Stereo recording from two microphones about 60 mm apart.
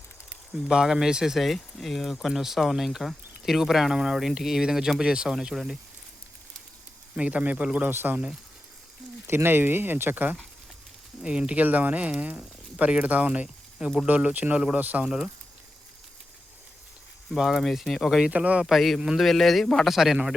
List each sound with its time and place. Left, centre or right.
0.7 s speech: centre
7.2 s speech: right
7.9 s speech: right
9.2 s speech: right
11.2 s speech: centre
17.3 s speech: centre
18.3 s speech: right
18.6 s a man's voice: centre
19.9 s speech: centre